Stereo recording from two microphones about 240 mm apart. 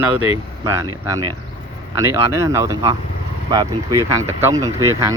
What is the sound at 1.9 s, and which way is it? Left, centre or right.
Speech, centre.